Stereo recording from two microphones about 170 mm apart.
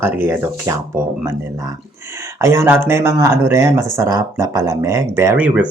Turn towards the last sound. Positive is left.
turn(degrees=-5)  # may be behind; listen again after turning